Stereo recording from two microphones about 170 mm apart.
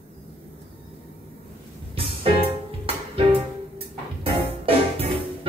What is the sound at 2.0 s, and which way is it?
Music, 35° right (ahead or behind).